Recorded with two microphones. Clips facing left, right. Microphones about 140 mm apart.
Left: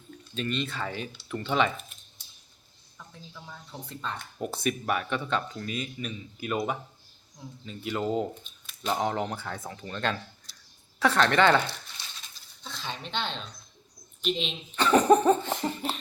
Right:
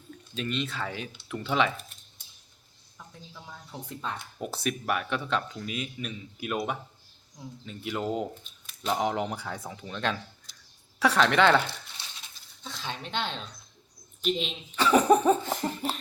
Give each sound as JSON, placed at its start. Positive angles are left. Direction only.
{"t": 0.3, "sound": "speech", "side_deg": 0}
{"t": 3.4, "sound": "speech", "side_deg": -10}